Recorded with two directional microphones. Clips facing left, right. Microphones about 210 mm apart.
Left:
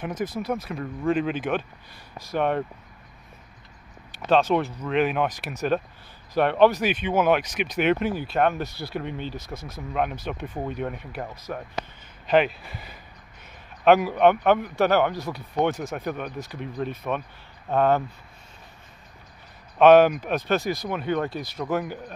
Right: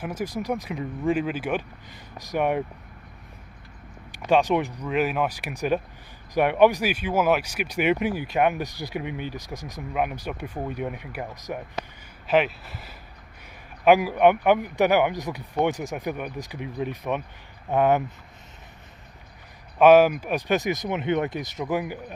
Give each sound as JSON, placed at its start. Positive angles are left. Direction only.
{"t": 0.0, "sound": "speech", "side_deg": -10}
{"t": 4.1, "sound": "speech", "side_deg": -15}
{"t": 12.3, "sound": "speech", "side_deg": -5}
{"t": 19.8, "sound": "speech", "side_deg": -5}